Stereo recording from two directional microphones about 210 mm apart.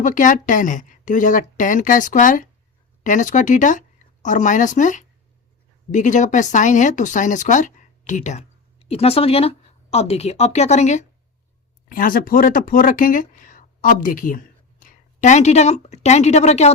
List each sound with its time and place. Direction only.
0.0 s speech: 40° left (ahead or behind)